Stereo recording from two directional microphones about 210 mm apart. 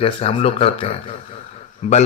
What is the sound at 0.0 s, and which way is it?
A man's voice, 25° left (ahead or behind).